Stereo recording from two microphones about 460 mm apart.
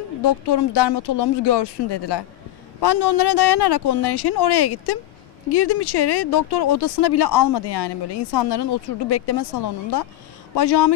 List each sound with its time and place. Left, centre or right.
0.2 s speech: left
7.5 s speech: left